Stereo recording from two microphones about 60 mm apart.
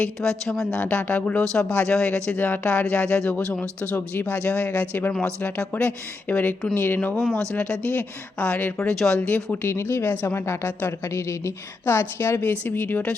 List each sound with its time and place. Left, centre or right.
0.0 s a woman's voice: centre
0.8 s speech: left
7.6 s speech: left
8.8 s a woman's voice: centre
9.6 s speech: left
10.7 s speech: left
11.0 s a woman's voice: left